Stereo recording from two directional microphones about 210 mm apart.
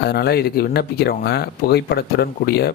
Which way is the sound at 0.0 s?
50° left (ahead or behind).